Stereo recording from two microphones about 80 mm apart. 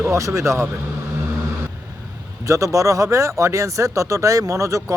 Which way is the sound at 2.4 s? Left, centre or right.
Right.